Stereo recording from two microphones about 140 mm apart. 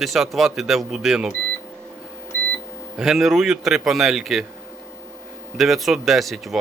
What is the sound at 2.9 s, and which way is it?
Speech, 5° right (ahead or behind).